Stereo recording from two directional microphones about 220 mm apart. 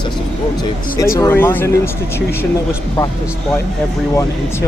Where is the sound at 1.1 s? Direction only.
10° left (ahead or behind).